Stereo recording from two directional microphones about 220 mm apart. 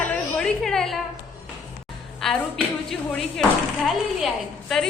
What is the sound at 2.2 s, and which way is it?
A woman's voice, centre (ahead or behind).